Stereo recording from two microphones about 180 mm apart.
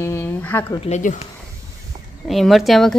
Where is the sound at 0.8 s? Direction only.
40° left (ahead or behind).